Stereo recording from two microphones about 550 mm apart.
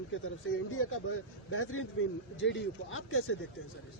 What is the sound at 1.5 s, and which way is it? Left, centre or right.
Speech, left.